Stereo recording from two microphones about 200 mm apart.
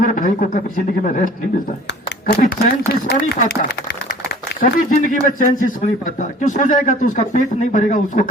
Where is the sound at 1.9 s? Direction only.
55° left (ahead or behind).